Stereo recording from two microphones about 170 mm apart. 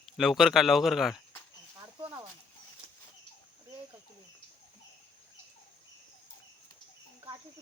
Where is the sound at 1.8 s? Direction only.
20° right (ahead or behind).